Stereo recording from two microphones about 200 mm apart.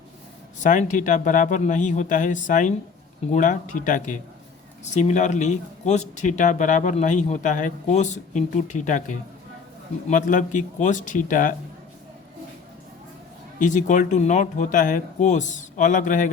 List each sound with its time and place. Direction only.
0.6 s speech: 40° left (ahead or behind)
13.6 s speech: 40° left (ahead or behind)